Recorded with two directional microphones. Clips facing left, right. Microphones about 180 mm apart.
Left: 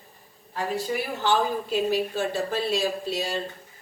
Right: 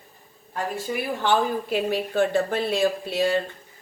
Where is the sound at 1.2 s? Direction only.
60° right (ahead or behind).